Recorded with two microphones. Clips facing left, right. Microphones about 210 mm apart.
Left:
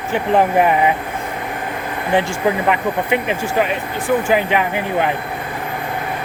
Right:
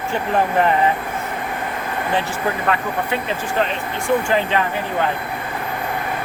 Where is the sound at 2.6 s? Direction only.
15° left (ahead or behind).